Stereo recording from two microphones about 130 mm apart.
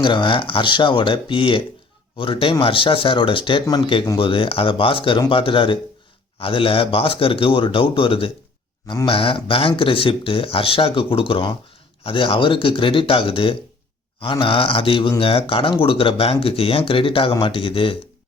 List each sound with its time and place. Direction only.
0.0 s speech: 35° left (ahead or behind)